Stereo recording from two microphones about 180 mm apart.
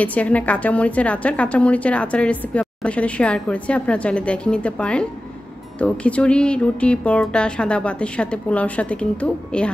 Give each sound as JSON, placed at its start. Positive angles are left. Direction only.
{"t": 0.0, "sound": "a woman's voice", "side_deg": 10}